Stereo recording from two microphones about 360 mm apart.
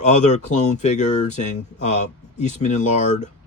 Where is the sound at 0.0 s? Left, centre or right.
Centre.